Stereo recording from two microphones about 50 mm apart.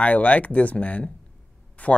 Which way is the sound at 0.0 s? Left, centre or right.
Left.